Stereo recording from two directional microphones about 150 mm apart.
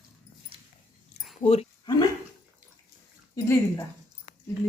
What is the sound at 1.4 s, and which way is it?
Speech, 45° left (ahead or behind).